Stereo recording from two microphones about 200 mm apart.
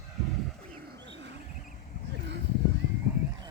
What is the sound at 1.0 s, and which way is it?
Wild animals, 60° right (ahead or behind).